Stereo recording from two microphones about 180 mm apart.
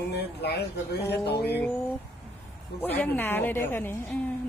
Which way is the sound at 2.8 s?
10° left (ahead or behind).